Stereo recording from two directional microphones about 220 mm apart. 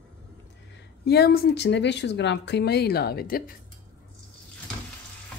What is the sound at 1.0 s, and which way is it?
Speech, 45° left (ahead or behind).